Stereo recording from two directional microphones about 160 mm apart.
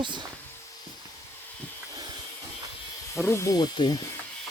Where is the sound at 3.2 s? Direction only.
15° left (ahead or behind).